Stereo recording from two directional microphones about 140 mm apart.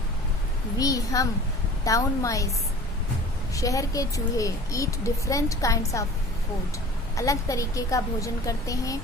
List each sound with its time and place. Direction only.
0.8 s a child's voice: 25° left (ahead or behind)
3.5 s a child's voice: 25° left (ahead or behind)
7.2 s a child's voice: 25° left (ahead or behind)